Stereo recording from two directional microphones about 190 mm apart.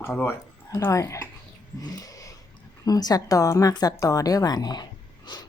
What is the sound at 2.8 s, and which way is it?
A woman's voice, 20° left (ahead or behind).